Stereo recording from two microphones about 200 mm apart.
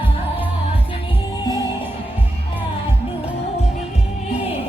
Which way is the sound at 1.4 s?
20° left (ahead or behind).